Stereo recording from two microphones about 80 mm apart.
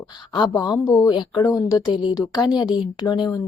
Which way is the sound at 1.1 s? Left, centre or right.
Left.